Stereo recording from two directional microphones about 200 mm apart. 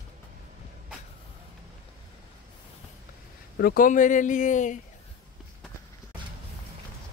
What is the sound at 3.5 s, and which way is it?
Speech, 50° left (ahead or behind).